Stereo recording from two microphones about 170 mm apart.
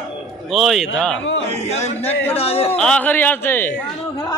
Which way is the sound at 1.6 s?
40° left (ahead or behind).